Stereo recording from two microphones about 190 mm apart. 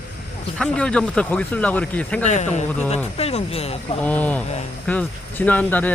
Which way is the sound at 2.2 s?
35° left (ahead or behind).